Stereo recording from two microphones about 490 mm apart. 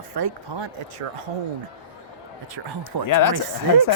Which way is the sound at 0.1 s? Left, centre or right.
Right.